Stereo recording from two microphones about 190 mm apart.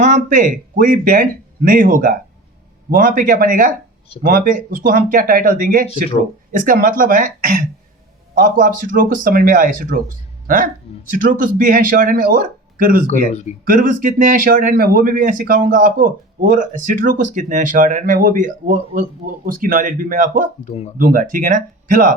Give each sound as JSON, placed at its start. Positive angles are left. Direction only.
{"t": 0.0, "sound": "speech", "side_deg": -40}
{"t": 20.7, "sound": "speech", "side_deg": 35}
{"t": 21.0, "sound": "speech", "side_deg": -45}